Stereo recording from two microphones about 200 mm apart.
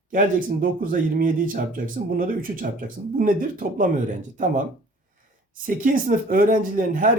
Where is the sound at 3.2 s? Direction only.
45° right (ahead or behind).